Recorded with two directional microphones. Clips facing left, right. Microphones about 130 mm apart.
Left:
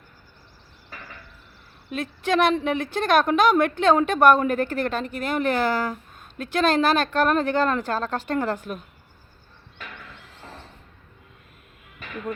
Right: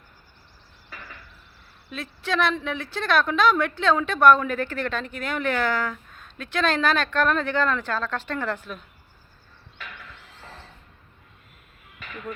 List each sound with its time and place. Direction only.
1.9 s a woman's voice: 50° left (ahead or behind)